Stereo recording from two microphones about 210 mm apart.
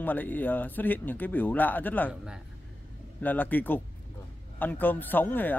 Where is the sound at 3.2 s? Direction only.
10° left (ahead or behind).